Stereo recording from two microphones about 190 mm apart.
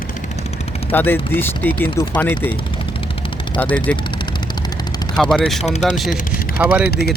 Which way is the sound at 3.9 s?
5° left (ahead or behind).